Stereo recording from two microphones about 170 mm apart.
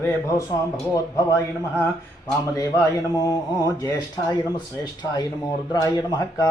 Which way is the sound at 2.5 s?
20° left (ahead or behind).